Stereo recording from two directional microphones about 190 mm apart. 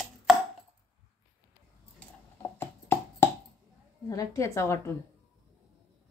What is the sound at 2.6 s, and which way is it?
Clip-clop, 10° left (ahead or behind).